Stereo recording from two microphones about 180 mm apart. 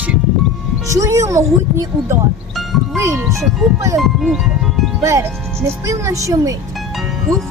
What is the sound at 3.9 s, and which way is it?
Speech, centre (ahead or behind).